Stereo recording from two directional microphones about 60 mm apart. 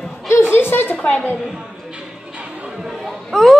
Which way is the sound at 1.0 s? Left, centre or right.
Left.